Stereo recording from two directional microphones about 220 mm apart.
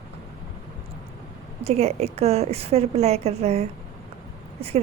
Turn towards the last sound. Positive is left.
turn(degrees=-30)  # may be behind; listen again after turning